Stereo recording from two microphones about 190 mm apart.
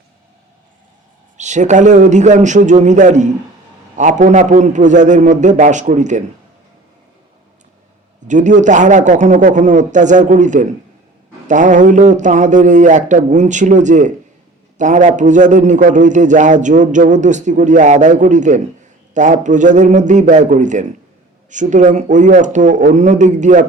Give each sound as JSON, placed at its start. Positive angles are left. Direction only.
{"t": 1.4, "sound": "a man's voice", "side_deg": -40}
{"t": 8.3, "sound": "a man's voice", "side_deg": -40}